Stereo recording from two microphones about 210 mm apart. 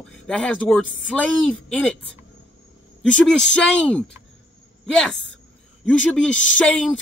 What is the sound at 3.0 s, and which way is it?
Speech, 5° left (ahead or behind).